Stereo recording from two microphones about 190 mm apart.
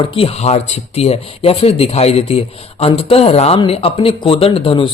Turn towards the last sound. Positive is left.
turn(degrees=30)  # may be behind; listen again after turning